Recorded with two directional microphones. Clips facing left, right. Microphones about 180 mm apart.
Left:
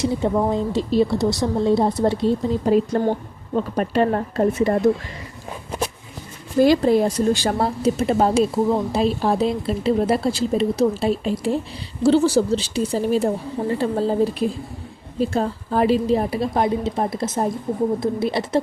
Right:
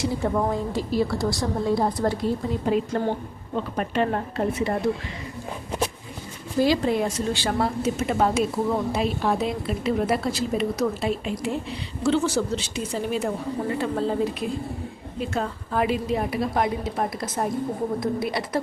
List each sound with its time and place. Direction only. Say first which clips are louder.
0.0 s a woman's voice: left 4 dB; 20° left (ahead or behind)
2.6 s speech: left 5 dB; 40° left (ahead or behind)
6.8 s a woman's voice: left 7 dB; 35° left (ahead or behind)